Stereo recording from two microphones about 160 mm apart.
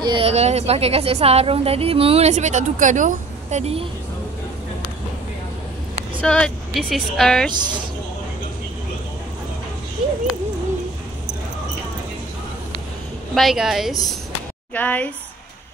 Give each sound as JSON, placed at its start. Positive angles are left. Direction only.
{"t": 0.0, "sound": "a woman's voice", "side_deg": -35}
{"t": 6.2, "sound": "a woman's voice", "side_deg": 5}
{"t": 13.3, "sound": "a woman's voice", "side_deg": 0}
{"t": 14.7, "sound": "speech", "side_deg": 10}